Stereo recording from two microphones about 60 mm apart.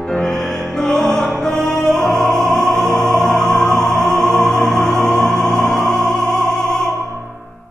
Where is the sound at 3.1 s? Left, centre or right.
Centre.